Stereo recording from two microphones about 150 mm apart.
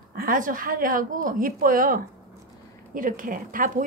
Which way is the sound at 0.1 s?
65° right (ahead or behind).